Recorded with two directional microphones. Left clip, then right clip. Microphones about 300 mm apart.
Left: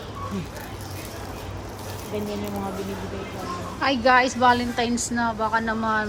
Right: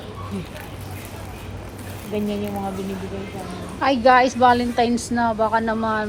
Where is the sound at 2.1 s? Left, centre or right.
Right.